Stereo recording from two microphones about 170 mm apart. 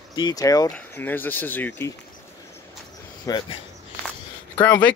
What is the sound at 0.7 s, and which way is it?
Speech, 10° left (ahead or behind).